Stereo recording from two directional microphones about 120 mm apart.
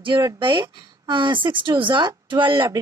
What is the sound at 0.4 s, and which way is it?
A woman's voice, 40° right (ahead or behind).